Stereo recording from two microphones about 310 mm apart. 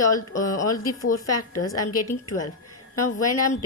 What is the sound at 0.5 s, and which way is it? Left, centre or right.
A woman's voice, left.